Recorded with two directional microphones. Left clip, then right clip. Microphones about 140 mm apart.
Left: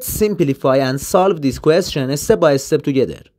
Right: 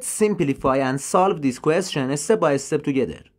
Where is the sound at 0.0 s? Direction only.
30° left (ahead or behind).